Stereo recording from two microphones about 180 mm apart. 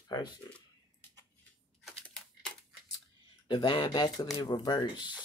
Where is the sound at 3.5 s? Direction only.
25° left (ahead or behind).